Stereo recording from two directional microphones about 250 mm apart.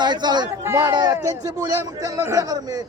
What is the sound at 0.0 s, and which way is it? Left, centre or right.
A man's voice, centre.